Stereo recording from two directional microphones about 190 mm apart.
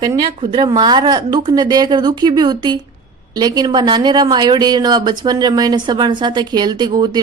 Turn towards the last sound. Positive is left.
turn(degrees=-20)  # may be behind; listen again after turning